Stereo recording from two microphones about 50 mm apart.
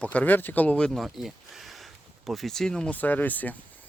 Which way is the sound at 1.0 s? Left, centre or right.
Centre.